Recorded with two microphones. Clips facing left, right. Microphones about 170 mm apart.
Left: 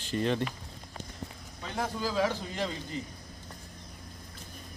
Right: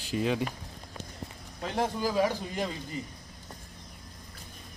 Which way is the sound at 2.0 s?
15° right (ahead or behind).